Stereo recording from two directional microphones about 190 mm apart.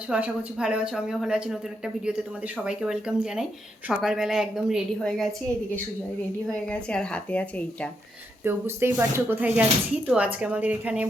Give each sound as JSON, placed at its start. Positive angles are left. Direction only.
{"t": 0.1, "sound": "a woman's voice", "side_deg": -5}
{"t": 6.5, "sound": "speech", "side_deg": 5}
{"t": 8.4, "sound": "speech", "side_deg": -10}